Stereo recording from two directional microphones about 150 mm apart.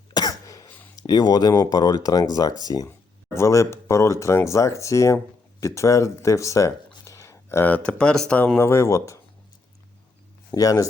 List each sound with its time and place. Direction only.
0.1 s cough: 25° left (ahead or behind)
0.9 s speech: 25° left (ahead or behind)
10.5 s speech: 20° left (ahead or behind)